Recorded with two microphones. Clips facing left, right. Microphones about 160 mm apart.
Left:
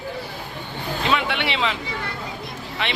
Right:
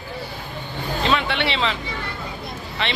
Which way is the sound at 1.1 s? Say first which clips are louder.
Right 1 dB; 10° left (ahead or behind).